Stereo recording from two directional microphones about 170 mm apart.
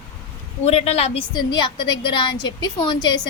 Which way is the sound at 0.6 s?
35° left (ahead or behind).